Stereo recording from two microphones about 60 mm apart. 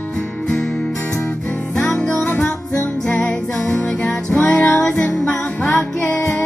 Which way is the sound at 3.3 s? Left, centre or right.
Centre.